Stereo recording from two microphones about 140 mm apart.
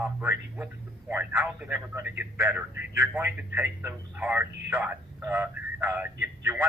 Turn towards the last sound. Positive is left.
turn(degrees=-10)  # may be behind; listen again after turning